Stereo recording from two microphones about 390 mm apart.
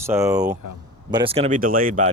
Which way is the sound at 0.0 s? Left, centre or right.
Centre.